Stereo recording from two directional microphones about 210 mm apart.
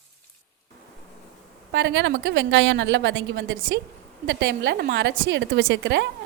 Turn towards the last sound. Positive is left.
turn(degrees=-55)  # may be behind; listen again after turning